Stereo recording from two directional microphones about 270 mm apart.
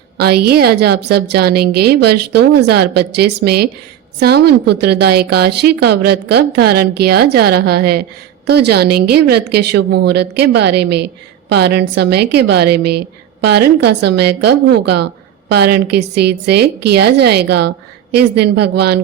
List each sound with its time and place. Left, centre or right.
0.2 s a woman's voice: right